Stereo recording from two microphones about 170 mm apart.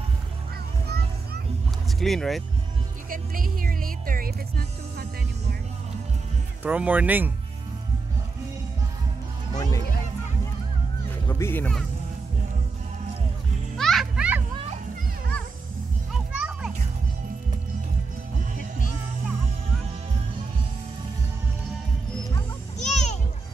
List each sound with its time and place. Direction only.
0.8 s a sound: 70° right (ahead or behind)
2.0 s speech: centre (ahead or behind)
3.1 s music: 55° right (ahead or behind)
6.6 s speech: 10° right (ahead or behind)
9.6 s speech: 20° left (ahead or behind)
11.2 s speech: 15° left (ahead or behind)
13.7 s music: centre (ahead or behind)
16.1 s children playing: 5° right (ahead or behind)
22.8 s children playing: 40° left (ahead or behind)